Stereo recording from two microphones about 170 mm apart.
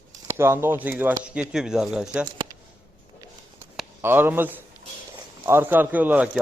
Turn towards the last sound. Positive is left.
turn(degrees=-10)  # may be behind; listen again after turning